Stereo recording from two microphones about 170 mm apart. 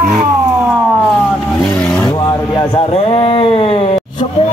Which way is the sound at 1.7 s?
10° left (ahead or behind).